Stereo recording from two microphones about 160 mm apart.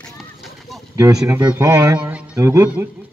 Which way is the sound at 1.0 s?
20° right (ahead or behind).